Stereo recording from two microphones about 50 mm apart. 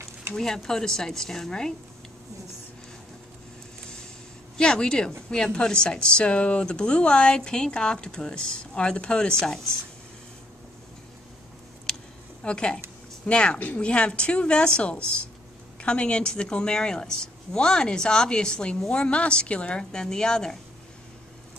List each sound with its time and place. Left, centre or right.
0.4 s speech: centre
4.6 s speech: centre
12.4 s speech: centre